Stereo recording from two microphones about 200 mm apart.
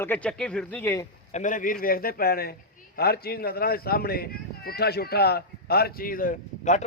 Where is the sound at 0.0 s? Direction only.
5° left (ahead or behind).